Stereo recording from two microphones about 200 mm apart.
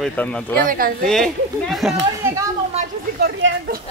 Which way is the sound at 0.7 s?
45° right (ahead or behind).